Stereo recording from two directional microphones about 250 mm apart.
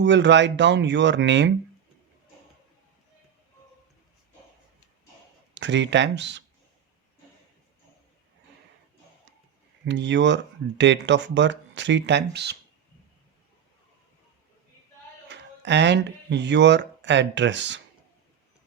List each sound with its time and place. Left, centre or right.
0.0 s speech: right
5.5 s speech: right
9.8 s speech: right
15.3 s speech: right